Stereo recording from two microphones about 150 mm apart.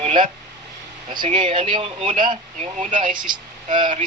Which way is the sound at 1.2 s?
35° right (ahead or behind).